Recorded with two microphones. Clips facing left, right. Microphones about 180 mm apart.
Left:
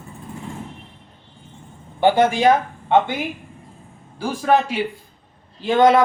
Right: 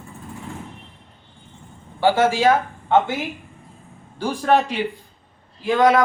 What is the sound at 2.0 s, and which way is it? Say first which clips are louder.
Speech: left 1 dB; 20° left (ahead or behind).